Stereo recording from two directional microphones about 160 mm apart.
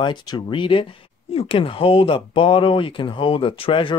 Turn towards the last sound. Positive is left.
turn(degrees=30)  # may be behind; listen again after turning